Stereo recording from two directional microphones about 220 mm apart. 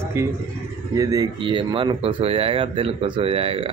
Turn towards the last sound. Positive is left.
turn(degrees=-25)  # may be behind; listen again after turning